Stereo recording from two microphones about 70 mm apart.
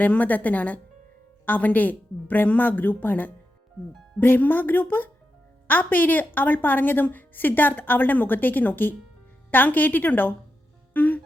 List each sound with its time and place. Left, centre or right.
0.0 s a woman's voice: left